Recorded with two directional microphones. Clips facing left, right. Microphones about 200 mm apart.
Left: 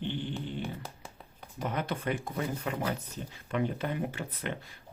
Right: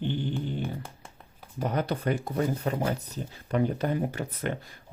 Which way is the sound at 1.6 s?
40° right (ahead or behind).